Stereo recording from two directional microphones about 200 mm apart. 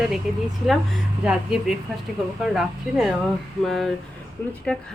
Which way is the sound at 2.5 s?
Centre (ahead or behind).